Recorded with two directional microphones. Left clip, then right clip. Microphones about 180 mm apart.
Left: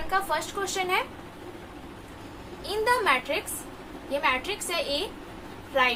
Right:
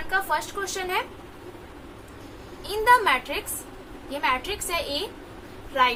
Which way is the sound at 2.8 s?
10° right (ahead or behind).